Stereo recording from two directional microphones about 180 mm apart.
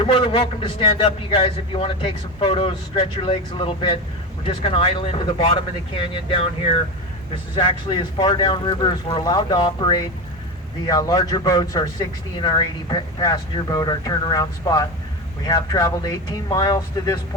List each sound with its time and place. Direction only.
0.0 s a man's voice: 30° left (ahead or behind)